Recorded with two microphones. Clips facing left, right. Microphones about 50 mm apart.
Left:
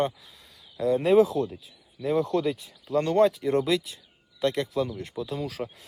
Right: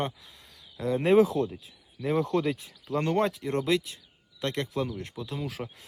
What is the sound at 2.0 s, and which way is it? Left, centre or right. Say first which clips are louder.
Speech: left 2 dB; centre.